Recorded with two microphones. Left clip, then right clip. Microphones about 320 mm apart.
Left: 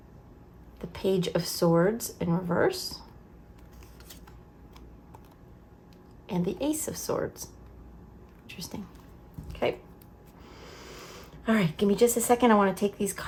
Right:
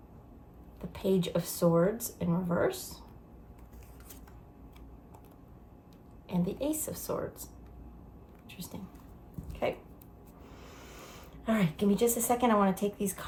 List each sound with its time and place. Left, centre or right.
0.8 s speech: left
6.2 s a woman's voice: left
10.6 s speech: left